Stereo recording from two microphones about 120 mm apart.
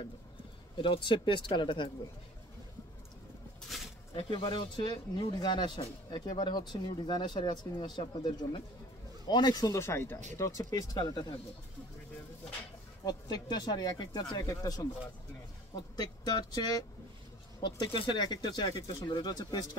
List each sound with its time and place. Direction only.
0.7 s speech: 45° left (ahead or behind)
3.6 s a sound: centre (ahead or behind)
4.1 s speech: 45° left (ahead or behind); by 11.2 s 30° left (ahead or behind)
13.0 s speech: 35° left (ahead or behind)